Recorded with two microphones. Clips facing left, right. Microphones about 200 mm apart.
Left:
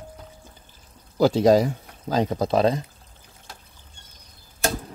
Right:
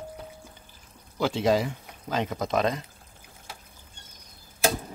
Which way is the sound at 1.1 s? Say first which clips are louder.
Left 7 dB; 40° left (ahead or behind).